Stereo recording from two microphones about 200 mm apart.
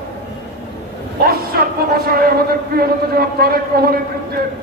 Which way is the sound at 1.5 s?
50° right (ahead or behind).